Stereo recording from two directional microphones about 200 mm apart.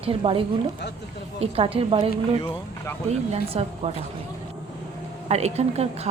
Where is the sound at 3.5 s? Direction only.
30° right (ahead or behind).